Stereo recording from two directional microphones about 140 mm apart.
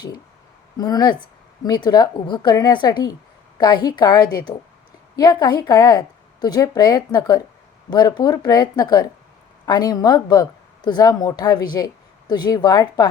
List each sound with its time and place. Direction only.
0.8 s a woman's voice: 25° left (ahead or behind)